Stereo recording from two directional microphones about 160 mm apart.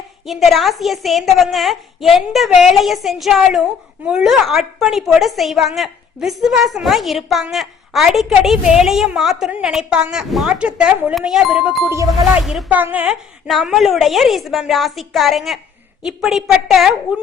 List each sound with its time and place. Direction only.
0.3 s a woman's voice: centre (ahead or behind)
11.9 s speech: 15° right (ahead or behind)
12.4 s a woman's voice: 5° right (ahead or behind)